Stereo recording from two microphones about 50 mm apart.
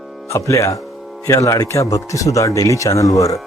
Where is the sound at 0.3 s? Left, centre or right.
Left.